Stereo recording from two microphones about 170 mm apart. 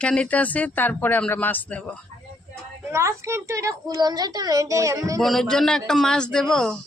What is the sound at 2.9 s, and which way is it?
A child's voice, 15° right (ahead or behind).